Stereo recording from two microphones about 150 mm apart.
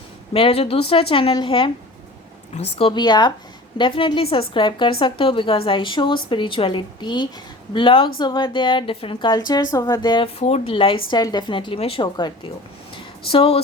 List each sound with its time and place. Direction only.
0.3 s a woman's voice: 40° left (ahead or behind)
10.4 s a woman's voice: 40° left (ahead or behind)
13.3 s a woman's voice: 40° left (ahead or behind)